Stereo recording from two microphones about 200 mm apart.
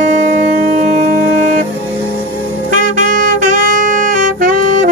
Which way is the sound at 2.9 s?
40° right (ahead or behind).